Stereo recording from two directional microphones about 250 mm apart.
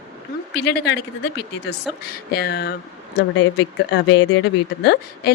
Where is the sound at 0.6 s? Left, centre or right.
Left.